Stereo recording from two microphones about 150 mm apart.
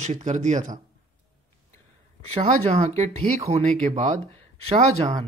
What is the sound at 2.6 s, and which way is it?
Speech, 45° right (ahead or behind).